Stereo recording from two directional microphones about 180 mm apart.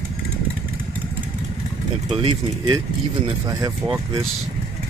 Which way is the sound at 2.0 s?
30° right (ahead or behind).